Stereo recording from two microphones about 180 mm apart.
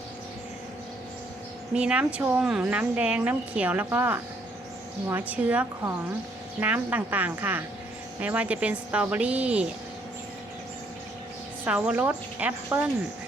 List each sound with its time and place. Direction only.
1.7 s speech: 5° right (ahead or behind)
11.6 s speech: 10° right (ahead or behind)